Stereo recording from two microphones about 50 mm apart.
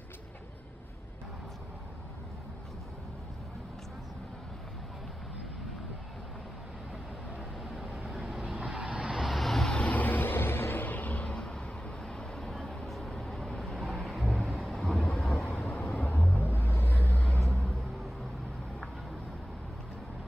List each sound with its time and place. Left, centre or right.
7.7 s vehicle: centre
8.5 s vehicle: centre
9.2 s vehicle: centre
9.7 s vehicle: left
9.9 s vehicle: left; by 14.2 s centre
14.2 s thunder: centre
15.0 s vehicle: centre; by 17.2 s left